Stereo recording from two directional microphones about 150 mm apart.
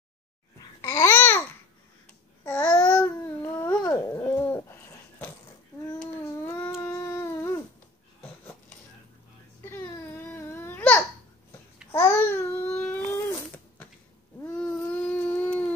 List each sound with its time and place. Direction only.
0.7 s babbling: 20° left (ahead or behind)
2.4 s babbling: 15° left (ahead or behind)
6.4 s a sound: 15° left (ahead or behind)
6.8 s dog: 20° left (ahead or behind)
9.6 s crying: 15° left (ahead or behind)
11.9 s babbling: 15° left (ahead or behind)
14.4 s a sound: 10° left (ahead or behind)